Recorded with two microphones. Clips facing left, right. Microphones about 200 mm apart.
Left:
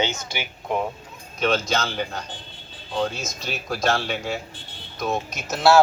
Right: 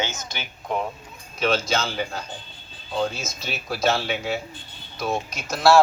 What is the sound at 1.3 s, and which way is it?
Speech, centre (ahead or behind).